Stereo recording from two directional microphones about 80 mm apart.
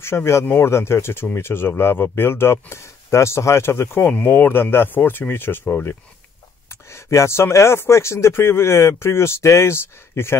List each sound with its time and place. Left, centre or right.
0.0 s speech: left